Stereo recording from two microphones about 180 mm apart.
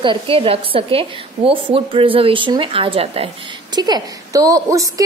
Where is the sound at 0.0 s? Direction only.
30° right (ahead or behind).